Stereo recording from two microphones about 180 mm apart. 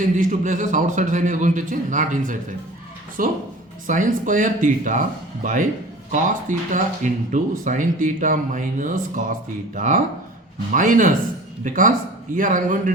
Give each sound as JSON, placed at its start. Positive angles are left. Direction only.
{"t": 0.0, "sound": "speech", "side_deg": -45}